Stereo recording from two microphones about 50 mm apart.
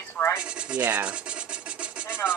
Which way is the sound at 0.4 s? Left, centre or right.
Right.